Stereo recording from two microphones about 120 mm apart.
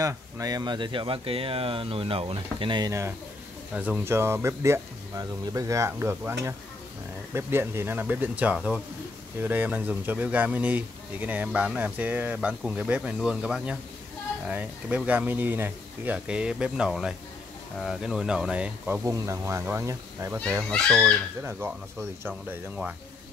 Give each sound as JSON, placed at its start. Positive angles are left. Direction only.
{"t": 0.0, "sound": "speech", "side_deg": -30}
{"t": 2.9, "sound": "speech", "side_deg": -20}
{"t": 19.0, "sound": "speech", "side_deg": -25}
{"t": 20.6, "sound": "speech", "side_deg": 5}
{"t": 21.5, "sound": "speech", "side_deg": -15}